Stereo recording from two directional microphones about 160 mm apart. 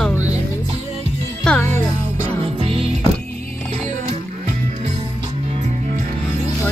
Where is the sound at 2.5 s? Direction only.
35° right (ahead or behind).